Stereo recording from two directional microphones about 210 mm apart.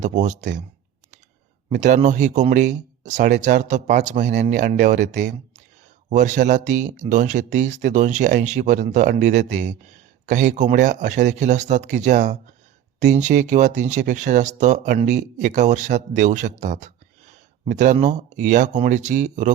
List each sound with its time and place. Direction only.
0.0 s speech: 35° right (ahead or behind)
1.7 s speech: 35° right (ahead or behind)
5.2 s a sound: 35° right (ahead or behind)
6.1 s speech: 35° right (ahead or behind)